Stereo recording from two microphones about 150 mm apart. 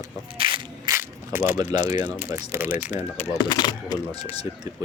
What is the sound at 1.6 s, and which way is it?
Speech, 50° left (ahead or behind).